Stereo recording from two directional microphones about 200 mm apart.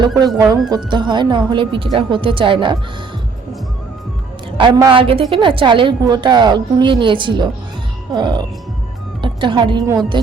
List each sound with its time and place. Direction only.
0.0 s a woman's voice: 20° right (ahead or behind)
4.5 s a woman's voice: 20° right (ahead or behind)